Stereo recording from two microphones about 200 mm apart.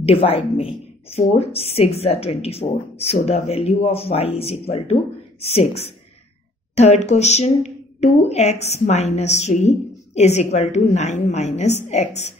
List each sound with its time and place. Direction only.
0.0 s a woman's voice: 30° left (ahead or behind)